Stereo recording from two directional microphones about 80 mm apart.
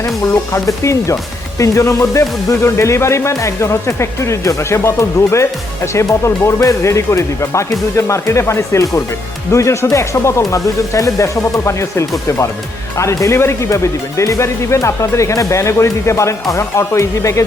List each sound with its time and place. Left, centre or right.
0.0 s speech: left